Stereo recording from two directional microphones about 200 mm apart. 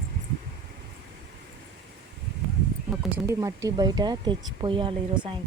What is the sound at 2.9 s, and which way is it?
A woman's voice, 5° right (ahead or behind).